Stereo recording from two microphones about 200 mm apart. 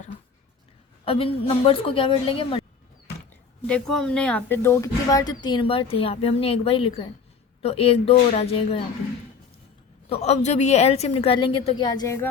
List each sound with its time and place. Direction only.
1.0 s speech: 25° left (ahead or behind)
3.7 s speech: 5° left (ahead or behind); by 8.8 s 30° left (ahead or behind)
10.1 s a woman's voice: 30° left (ahead or behind); by 12.3 s 15° left (ahead or behind)